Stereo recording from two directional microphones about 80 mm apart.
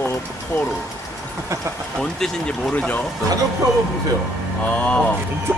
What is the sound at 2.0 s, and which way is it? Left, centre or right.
Speech, centre.